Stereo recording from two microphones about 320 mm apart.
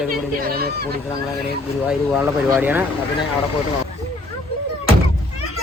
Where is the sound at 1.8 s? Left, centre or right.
Centre.